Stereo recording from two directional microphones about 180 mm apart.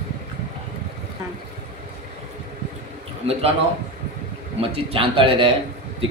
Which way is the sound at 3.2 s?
35° right (ahead or behind).